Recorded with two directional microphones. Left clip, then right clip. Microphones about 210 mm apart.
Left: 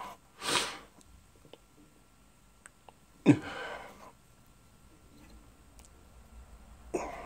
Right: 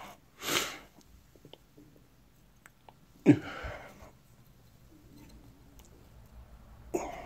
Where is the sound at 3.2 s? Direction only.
5° left (ahead or behind).